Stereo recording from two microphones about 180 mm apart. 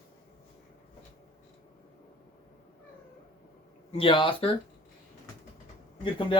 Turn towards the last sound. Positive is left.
turn(degrees=25)  # may be behind; listen again after turning